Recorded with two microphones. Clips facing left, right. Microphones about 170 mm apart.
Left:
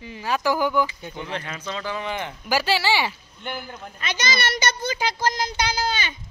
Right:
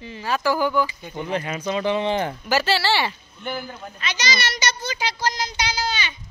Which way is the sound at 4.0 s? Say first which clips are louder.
Left 1 dB; 55° left (ahead or behind).